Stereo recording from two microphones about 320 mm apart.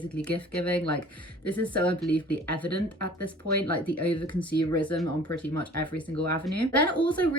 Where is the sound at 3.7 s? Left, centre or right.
Centre.